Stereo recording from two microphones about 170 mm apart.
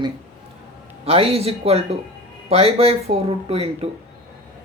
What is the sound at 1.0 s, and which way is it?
Speech, 35° right (ahead or behind).